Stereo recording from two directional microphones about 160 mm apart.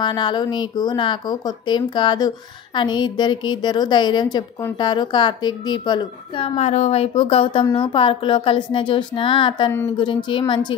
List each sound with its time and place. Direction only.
0.0 s a woman's voice: 30° left (ahead or behind)